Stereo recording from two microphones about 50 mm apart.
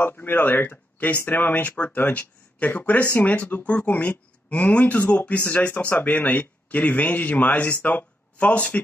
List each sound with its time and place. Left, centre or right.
0.0 s speech: left